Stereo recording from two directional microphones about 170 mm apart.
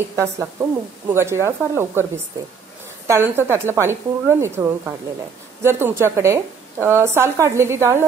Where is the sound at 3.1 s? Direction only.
15° right (ahead or behind).